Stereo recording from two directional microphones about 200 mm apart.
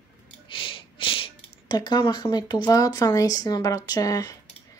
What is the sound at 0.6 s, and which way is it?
Speech, 25° left (ahead or behind).